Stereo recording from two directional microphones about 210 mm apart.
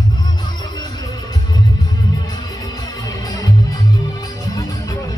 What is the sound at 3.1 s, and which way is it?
Music, 15° left (ahead or behind).